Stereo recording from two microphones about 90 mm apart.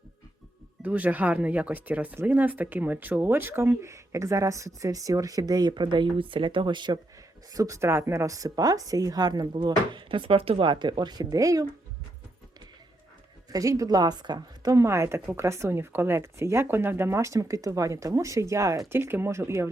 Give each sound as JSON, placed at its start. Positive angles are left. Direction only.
{"t": 0.8, "sound": "speech", "side_deg": -15}
{"t": 7.5, "sound": "speech", "side_deg": -40}
{"t": 9.5, "sound": "speech", "side_deg": -65}
{"t": 13.5, "sound": "a woman's voice", "side_deg": -40}
{"t": 14.7, "sound": "speech", "side_deg": -30}